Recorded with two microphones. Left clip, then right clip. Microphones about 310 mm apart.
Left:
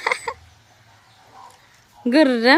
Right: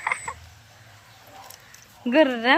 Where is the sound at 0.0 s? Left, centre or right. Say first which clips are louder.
Left 5 dB; centre.